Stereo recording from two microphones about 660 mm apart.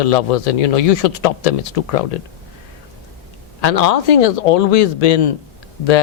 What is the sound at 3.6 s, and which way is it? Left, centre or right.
Speech, left.